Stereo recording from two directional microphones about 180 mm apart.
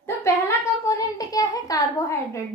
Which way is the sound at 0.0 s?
15° left (ahead or behind).